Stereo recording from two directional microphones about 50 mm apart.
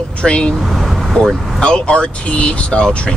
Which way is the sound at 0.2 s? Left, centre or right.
Centre.